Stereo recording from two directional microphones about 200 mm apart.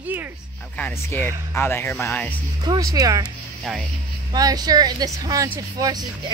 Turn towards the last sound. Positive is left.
turn(degrees=-20)  # may be behind; listen again after turning